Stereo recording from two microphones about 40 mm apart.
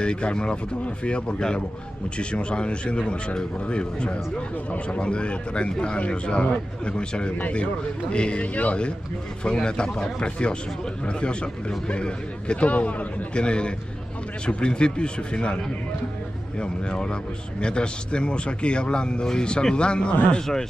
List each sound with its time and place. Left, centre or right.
0.0 s speech: left
7.3 s speech: left
8.1 s speech: left